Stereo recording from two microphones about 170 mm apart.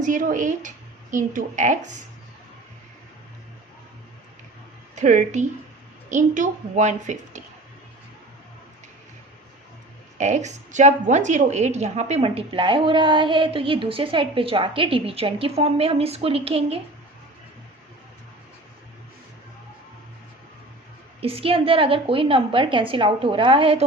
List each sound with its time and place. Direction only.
0.0 s a woman's voice: 50° right (ahead or behind)
4.9 s a woman's voice: 45° right (ahead or behind)
10.2 s a woman's voice: 45° right (ahead or behind)
21.2 s a woman's voice: 35° right (ahead or behind)